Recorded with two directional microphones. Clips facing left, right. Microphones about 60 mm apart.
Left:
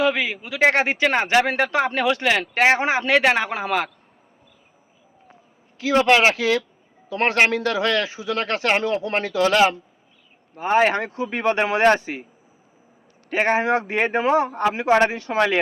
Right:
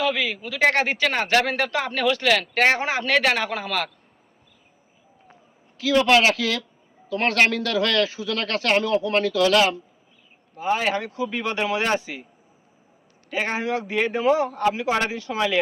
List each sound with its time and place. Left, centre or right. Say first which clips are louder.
0.0 s a man's voice: left 3 dB; left
2.6 s a man's voice: left 2 dB; centre
5.8 s a man's voice: left 1 dB; left
10.5 s speech: left 5 dB; left
13.3 s speech: left 6 dB; left